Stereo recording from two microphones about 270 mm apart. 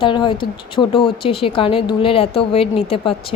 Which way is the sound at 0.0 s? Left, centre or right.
Centre.